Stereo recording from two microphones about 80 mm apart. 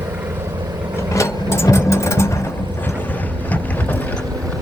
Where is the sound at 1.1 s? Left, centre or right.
Left.